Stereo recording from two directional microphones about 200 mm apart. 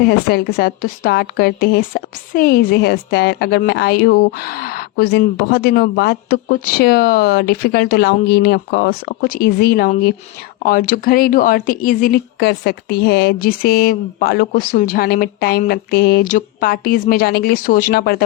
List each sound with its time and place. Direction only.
0.0 s a woman's voice: 55° left (ahead or behind)